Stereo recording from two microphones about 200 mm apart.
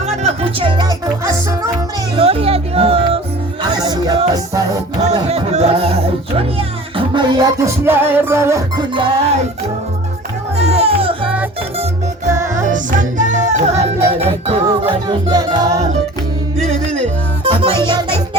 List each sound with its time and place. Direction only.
0.0 s music: 30° right (ahead or behind); by 1.7 s 15° right (ahead or behind)
2.1 s speech: 30° right (ahead or behind)
3.6 s music: 20° right (ahead or behind)
5.0 s speech: 30° right (ahead or behind)
10.6 s music: 30° right (ahead or behind)
12.6 s music: 40° right (ahead or behind)
14.1 s speech: 30° right (ahead or behind)
16.6 s music: 35° right (ahead or behind)